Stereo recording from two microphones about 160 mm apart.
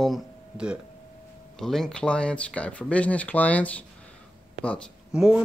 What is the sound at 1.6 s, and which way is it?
Speech, centre (ahead or behind).